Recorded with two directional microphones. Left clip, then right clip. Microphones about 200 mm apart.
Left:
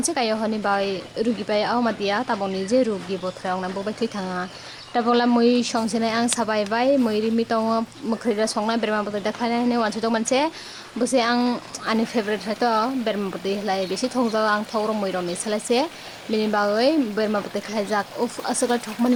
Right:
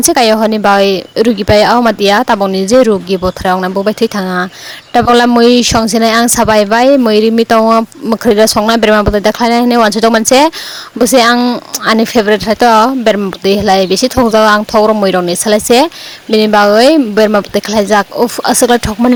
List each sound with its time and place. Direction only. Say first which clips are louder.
0.0 s speech: right 15 dB; 50° right (ahead or behind)